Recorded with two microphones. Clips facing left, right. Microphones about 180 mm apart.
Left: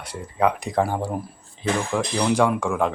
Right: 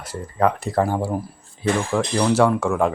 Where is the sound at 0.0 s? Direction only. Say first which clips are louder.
Right 1 dB; centre (ahead or behind).